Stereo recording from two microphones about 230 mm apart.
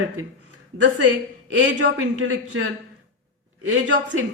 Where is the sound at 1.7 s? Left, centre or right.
Right.